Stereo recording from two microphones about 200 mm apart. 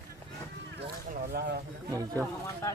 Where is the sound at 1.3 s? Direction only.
50° right (ahead or behind).